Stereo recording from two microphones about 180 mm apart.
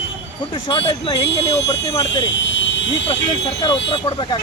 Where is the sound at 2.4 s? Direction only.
85° left.